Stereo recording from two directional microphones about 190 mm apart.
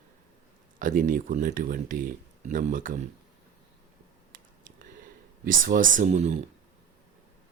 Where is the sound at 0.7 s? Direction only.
45° right (ahead or behind).